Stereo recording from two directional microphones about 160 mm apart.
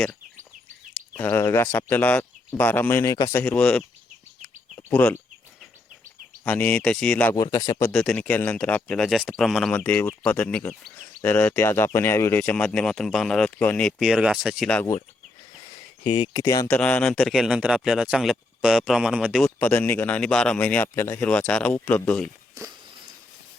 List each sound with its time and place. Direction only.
1.1 s speech: 15° left (ahead or behind)
6.4 s speech: 10° left (ahead or behind)
7.3 s speech: 20° left (ahead or behind)
7.9 s speech: 5° left (ahead or behind)
14.0 s speech: 5° right (ahead or behind)
16.0 s speech: 35° left (ahead or behind)
16.7 s speech: 10° left (ahead or behind)
19.5 s speech: 10° left (ahead or behind)